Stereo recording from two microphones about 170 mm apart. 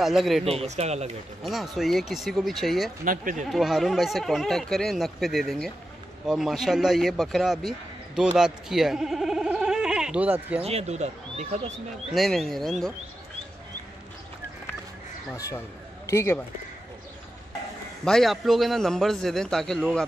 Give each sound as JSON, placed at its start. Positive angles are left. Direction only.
{"t": 0.0, "sound": "speech", "side_deg": 0}
{"t": 0.5, "sound": "speech", "side_deg": -40}
{"t": 1.4, "sound": "speech", "side_deg": 0}
{"t": 3.1, "sound": "speech", "side_deg": -55}
{"t": 3.4, "sound": "speech", "side_deg": 0}
{"t": 10.6, "sound": "speech", "side_deg": -40}
{"t": 12.1, "sound": "speech", "side_deg": 0}
{"t": 16.1, "sound": "speech", "side_deg": 15}
{"t": 18.0, "sound": "speech", "side_deg": 0}